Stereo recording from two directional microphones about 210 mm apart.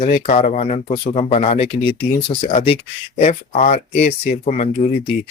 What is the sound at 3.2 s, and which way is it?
Speech, 35° left (ahead or behind).